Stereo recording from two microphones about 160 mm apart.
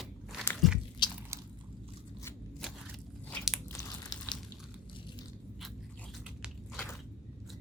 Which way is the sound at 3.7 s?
20° left (ahead or behind).